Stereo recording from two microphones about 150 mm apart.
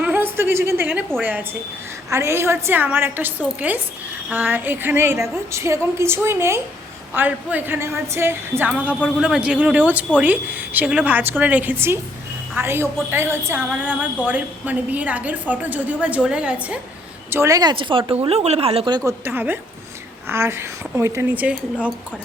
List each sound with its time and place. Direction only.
0.0 s a sound: 10° right (ahead or behind)
2.0 s a woman's voice: 20° right (ahead or behind)
17.3 s speech: 20° right (ahead or behind)
19.2 s a woman's voice: 15° right (ahead or behind)